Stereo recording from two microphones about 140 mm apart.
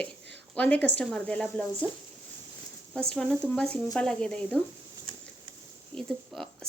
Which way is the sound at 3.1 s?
5° left (ahead or behind).